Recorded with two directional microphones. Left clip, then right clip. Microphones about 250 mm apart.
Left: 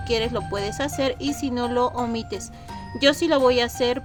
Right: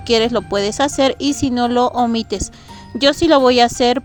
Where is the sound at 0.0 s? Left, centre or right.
Right.